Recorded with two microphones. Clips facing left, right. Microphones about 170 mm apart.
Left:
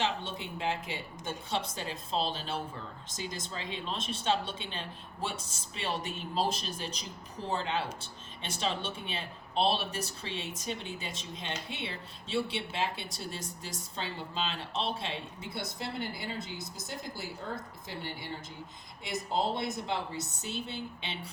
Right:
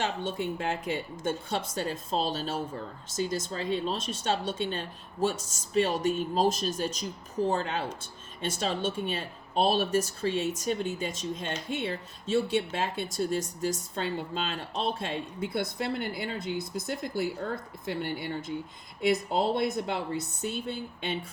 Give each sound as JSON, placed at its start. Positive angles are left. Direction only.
{"t": 0.0, "sound": "speech", "side_deg": -45}